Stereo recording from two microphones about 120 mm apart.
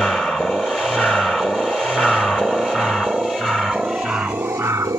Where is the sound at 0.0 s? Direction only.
5° left (ahead or behind).